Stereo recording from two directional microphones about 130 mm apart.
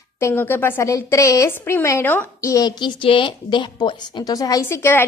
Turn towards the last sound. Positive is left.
turn(degrees=20)  # may be behind; listen again after turning